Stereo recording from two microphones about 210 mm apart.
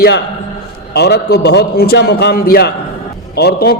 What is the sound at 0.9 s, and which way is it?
A man's voice, 50° left (ahead or behind).